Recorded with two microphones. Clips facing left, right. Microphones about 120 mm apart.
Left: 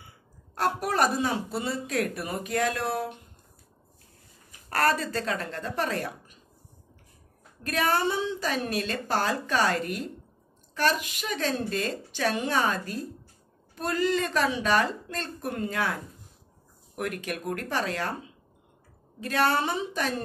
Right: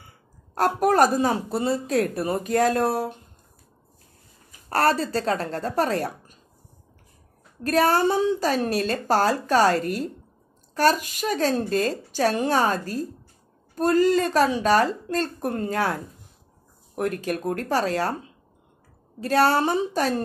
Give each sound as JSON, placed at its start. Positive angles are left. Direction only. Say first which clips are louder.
{"t": 0.6, "sound": "speech", "louder": "right 7 dB", "side_deg": -45}
{"t": 4.6, "sound": "speech", "louder": "right 4 dB", "side_deg": -30}
{"t": 7.6, "sound": "speech", "louder": "right 6 dB", "side_deg": -40}
{"t": 19.1, "sound": "speech", "louder": "right 5 dB", "side_deg": -35}